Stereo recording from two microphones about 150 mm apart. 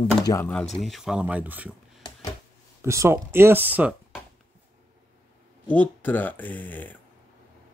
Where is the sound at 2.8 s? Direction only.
20° right (ahead or behind).